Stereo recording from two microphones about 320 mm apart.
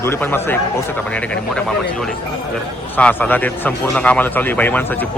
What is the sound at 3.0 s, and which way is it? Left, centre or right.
Speech, centre.